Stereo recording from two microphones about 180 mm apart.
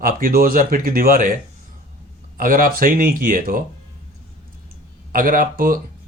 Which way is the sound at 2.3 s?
50° right (ahead or behind).